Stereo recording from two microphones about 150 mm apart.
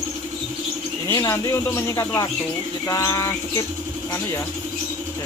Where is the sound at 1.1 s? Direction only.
20° left (ahead or behind).